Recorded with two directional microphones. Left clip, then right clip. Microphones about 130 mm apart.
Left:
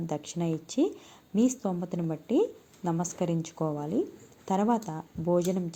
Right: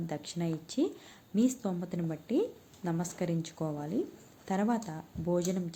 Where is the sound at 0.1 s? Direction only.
15° left (ahead or behind).